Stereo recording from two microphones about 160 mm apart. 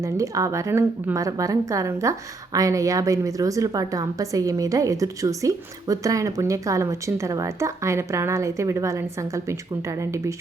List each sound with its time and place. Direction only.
0.0 s a woman's voice: 20° right (ahead or behind)